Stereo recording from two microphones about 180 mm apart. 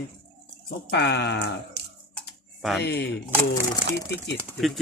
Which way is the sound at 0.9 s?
70° left (ahead or behind).